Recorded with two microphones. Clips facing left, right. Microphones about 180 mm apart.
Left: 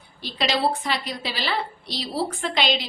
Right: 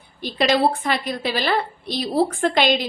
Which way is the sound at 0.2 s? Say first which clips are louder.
Right 6 dB; 50° right (ahead or behind).